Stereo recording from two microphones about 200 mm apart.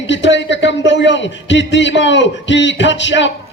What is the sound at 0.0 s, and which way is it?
A man's voice, 65° left (ahead or behind).